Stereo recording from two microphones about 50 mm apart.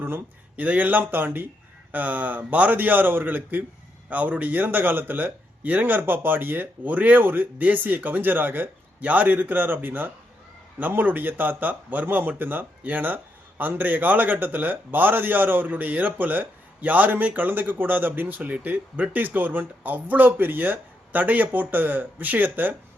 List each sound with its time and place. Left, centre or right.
0.5 s a man's voice: right